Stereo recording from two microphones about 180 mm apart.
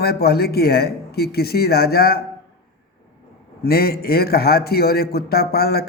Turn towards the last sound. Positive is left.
turn(degrees=60)  # may be behind; listen again after turning